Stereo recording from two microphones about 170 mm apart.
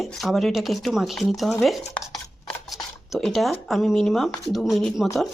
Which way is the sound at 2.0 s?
20° left (ahead or behind).